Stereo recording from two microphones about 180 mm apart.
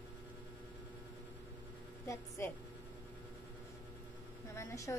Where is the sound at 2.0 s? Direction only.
15° left (ahead or behind).